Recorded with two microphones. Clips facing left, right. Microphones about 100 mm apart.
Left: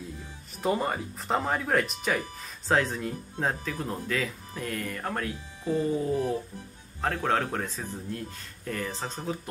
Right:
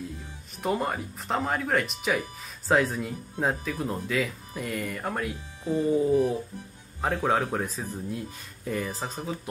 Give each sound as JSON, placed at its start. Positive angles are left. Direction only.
{"t": 0.6, "sound": "speech", "side_deg": 0}
{"t": 5.6, "sound": "speech", "side_deg": -15}